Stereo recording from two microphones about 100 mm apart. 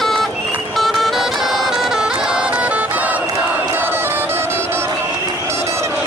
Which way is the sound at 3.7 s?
20° right (ahead or behind).